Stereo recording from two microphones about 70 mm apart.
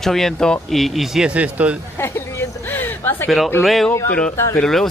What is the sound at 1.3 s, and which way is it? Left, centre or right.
Speech, centre.